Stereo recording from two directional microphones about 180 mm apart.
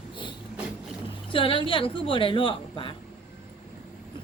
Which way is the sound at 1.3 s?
30° left (ahead or behind).